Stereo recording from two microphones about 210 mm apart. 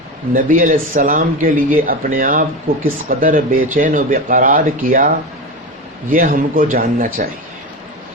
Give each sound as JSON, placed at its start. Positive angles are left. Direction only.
{"t": 0.3, "sound": "speech", "side_deg": -40}